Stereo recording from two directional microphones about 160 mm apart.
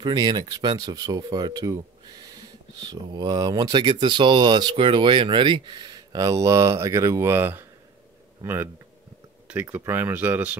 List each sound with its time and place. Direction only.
0.0 s speech: 25° right (ahead or behind)
2.8 s speech: 25° right (ahead or behind); by 10.5 s 10° right (ahead or behind)